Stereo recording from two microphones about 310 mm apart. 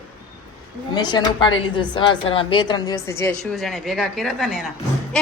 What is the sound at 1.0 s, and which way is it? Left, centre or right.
A woman's voice, centre.